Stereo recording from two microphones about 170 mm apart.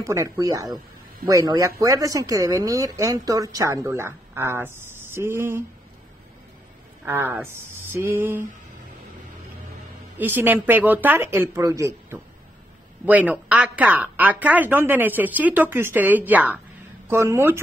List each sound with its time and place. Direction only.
0.0 s a woman's voice: 20° right (ahead or behind)
7.1 s speech: 15° right (ahead or behind)
10.1 s speech: 10° right (ahead or behind)